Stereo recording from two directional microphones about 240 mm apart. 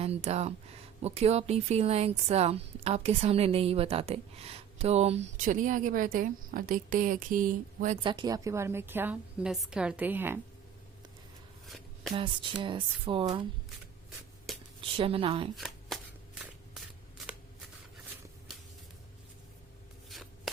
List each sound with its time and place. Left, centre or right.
0.0 s speech: right
8.0 s a woman's voice: centre
11.6 s a sound: centre
12.1 s speech: centre
14.8 s speech: right
15.5 s shuffling cards: centre
20.1 s shuffling cards: centre